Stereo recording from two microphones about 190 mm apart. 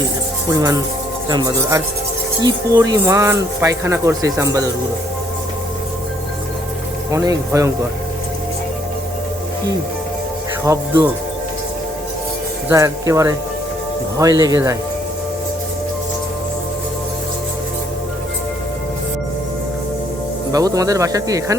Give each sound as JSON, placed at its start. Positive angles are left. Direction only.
{"t": 0.5, "sound": "speech", "side_deg": -15}
{"t": 7.1, "sound": "speech", "side_deg": -15}
{"t": 10.7, "sound": "speech", "side_deg": -10}
{"t": 12.6, "sound": "speech", "side_deg": -15}
{"t": 20.5, "sound": "speech", "side_deg": -20}